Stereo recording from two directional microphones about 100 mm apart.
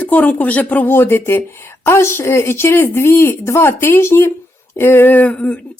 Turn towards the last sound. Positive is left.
turn(degrees=15)  # may be behind; listen again after turning